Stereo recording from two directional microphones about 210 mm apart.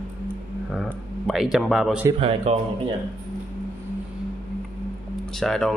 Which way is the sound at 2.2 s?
30° right (ahead or behind).